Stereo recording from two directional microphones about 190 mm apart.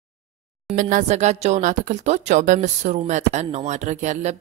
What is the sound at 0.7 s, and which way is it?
Speech, 45° right (ahead or behind).